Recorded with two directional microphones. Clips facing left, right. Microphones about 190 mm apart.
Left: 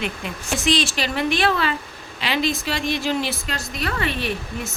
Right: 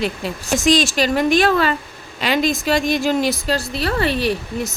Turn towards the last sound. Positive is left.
turn(degrees=-35)  # may be behind; listen again after turning